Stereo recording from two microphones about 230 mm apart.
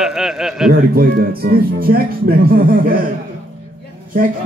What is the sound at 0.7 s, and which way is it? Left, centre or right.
Speech, right.